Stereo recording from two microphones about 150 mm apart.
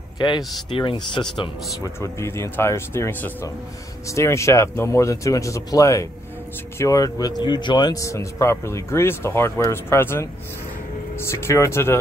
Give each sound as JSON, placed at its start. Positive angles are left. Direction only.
{"t": 0.2, "sound": "speech", "side_deg": 30}
{"t": 2.0, "sound": "speech", "side_deg": 15}